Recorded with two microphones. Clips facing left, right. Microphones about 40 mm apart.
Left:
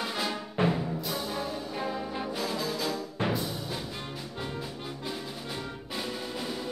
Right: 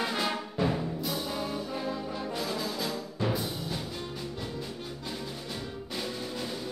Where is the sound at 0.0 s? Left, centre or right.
Centre.